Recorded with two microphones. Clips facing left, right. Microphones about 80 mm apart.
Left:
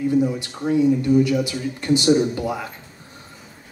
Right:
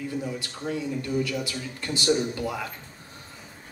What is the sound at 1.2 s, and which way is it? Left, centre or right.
Speech, centre.